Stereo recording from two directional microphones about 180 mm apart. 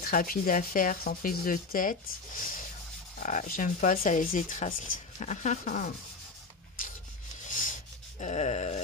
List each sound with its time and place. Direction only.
0.0 s speech: 55° left (ahead or behind)
7.4 s rub: 45° left (ahead or behind)
8.2 s wail: 40° left (ahead or behind)